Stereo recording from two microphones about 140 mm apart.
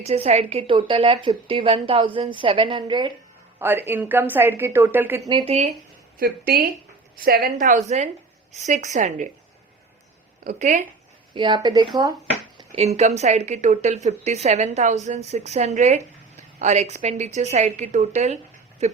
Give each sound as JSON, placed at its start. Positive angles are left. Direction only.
{"t": 0.0, "sound": "a woman's voice", "side_deg": -50}
{"t": 3.6, "sound": "a woman's voice", "side_deg": -15}
{"t": 5.5, "sound": "a woman's voice", "side_deg": -50}
{"t": 6.1, "sound": "a woman's voice", "side_deg": -90}
{"t": 10.4, "sound": "a woman's voice", "side_deg": -60}
{"t": 11.3, "sound": "a woman's voice", "side_deg": -35}
{"t": 12.7, "sound": "a woman's voice", "side_deg": -50}